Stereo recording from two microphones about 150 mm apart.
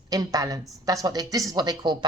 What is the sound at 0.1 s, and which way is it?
Speech, 25° right (ahead or behind).